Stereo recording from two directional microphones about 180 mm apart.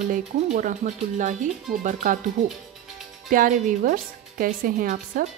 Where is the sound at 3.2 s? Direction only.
45° right (ahead or behind).